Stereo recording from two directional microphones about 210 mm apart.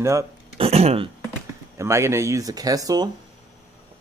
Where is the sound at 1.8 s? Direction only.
15° right (ahead or behind).